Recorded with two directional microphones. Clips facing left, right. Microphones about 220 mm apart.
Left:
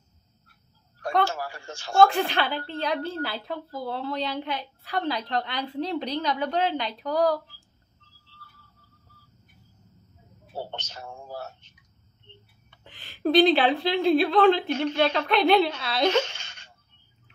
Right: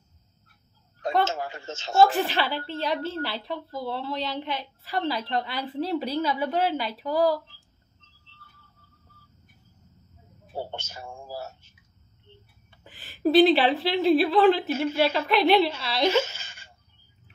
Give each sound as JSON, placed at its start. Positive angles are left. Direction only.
{"t": 1.2, "sound": "speech", "side_deg": -20}
{"t": 2.0, "sound": "a woman's voice", "side_deg": -5}
{"t": 8.0, "sound": "a sound", "side_deg": -20}
{"t": 10.5, "sound": "speech", "side_deg": -10}
{"t": 12.8, "sound": "a woman's voice", "side_deg": -5}